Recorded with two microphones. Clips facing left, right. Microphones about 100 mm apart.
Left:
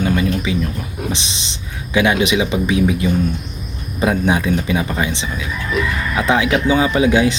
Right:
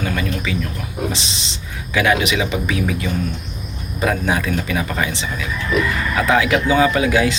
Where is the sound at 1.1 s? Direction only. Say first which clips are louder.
Left 1 dB; 20° left (ahead or behind).